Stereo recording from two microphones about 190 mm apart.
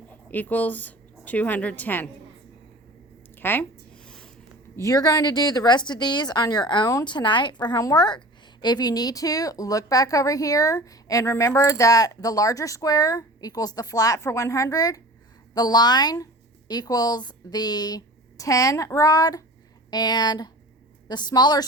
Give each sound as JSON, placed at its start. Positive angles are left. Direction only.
{"t": 0.3, "sound": "a woman's voice", "side_deg": 10}
{"t": 3.3, "sound": "a sound", "side_deg": 10}
{"t": 4.8, "sound": "a woman's voice", "side_deg": 15}